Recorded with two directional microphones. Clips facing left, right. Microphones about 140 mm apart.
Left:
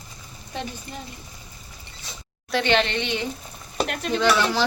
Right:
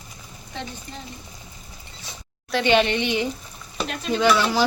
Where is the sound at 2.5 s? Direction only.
Centre (ahead or behind).